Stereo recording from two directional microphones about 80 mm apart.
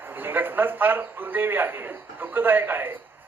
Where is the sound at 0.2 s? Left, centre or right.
Right.